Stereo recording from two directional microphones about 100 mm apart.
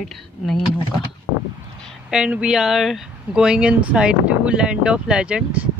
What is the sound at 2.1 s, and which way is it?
Speech, 10° right (ahead or behind).